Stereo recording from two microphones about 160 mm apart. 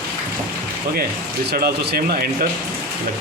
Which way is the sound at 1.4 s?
80° right.